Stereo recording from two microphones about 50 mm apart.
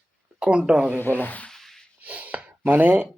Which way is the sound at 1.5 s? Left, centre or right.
Centre.